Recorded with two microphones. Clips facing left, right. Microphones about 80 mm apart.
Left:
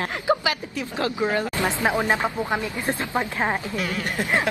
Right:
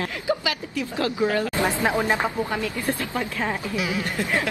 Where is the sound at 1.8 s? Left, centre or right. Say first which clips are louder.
Left 2 dB; left.